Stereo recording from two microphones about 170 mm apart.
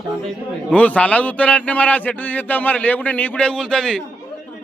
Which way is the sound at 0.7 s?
10° left (ahead or behind).